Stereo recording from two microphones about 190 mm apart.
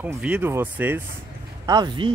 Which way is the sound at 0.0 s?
5° right (ahead or behind).